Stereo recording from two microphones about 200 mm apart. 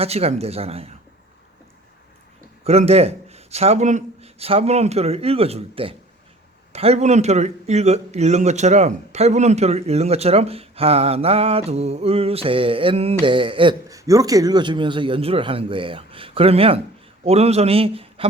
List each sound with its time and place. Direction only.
0.0 s speech: 30° right (ahead or behind)
2.6 s a man's voice: 30° right (ahead or behind)